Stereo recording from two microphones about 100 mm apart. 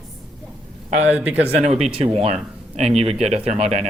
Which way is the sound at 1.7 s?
90° right.